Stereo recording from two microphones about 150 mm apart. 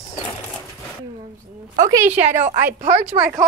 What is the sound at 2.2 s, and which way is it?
Speech, 55° right (ahead or behind).